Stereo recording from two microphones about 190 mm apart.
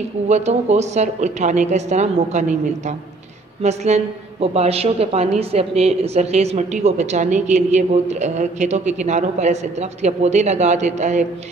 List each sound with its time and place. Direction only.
0.3 s a woman's voice: 35° right (ahead or behind)